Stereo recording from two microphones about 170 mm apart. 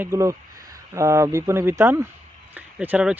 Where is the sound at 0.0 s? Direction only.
15° right (ahead or behind).